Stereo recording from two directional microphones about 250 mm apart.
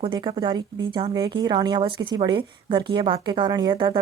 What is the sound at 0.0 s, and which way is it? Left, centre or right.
Speech, centre.